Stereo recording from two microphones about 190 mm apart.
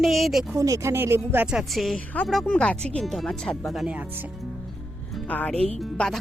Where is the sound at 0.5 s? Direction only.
15° right (ahead or behind).